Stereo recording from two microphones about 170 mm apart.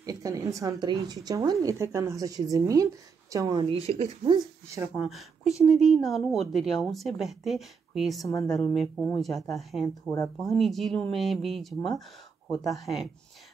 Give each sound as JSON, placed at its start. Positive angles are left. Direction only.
{"t": 0.0, "sound": "speech", "side_deg": -20}
{"t": 3.8, "sound": "speech", "side_deg": -35}
{"t": 4.9, "sound": "a woman's voice", "side_deg": 0}
{"t": 10.1, "sound": "speech", "side_deg": 20}
{"t": 10.5, "sound": "a woman's voice", "side_deg": 0}